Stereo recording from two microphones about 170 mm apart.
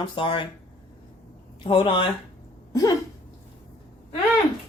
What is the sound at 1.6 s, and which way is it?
Speech, 30° left (ahead or behind).